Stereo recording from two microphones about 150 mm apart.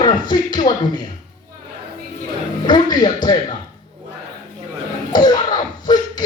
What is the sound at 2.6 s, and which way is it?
Speech, 30° left (ahead or behind).